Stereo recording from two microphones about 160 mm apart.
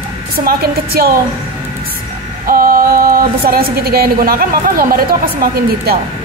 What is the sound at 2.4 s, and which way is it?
Music, 65° right (ahead or behind).